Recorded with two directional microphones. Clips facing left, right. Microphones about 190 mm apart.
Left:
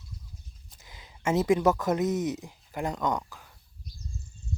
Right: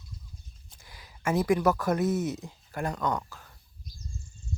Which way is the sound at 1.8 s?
20° left (ahead or behind).